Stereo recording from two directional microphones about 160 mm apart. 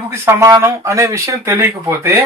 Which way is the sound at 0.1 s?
15° right (ahead or behind).